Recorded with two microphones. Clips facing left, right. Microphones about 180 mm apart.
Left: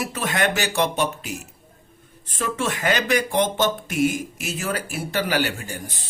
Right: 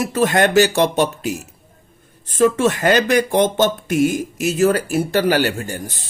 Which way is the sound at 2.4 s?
45° right (ahead or behind).